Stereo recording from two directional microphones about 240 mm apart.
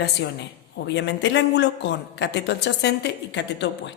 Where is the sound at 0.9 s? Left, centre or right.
Left.